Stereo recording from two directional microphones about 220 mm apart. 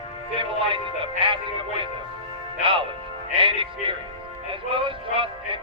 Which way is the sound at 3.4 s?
25° right (ahead or behind).